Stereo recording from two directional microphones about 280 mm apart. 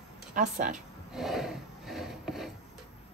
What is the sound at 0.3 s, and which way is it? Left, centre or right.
Speech, right.